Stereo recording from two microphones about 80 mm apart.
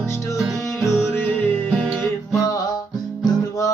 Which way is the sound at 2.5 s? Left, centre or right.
Left.